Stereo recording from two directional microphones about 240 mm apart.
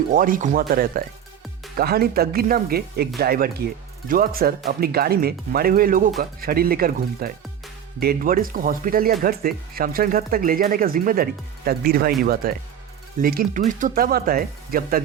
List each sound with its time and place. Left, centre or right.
0.1 s speech: right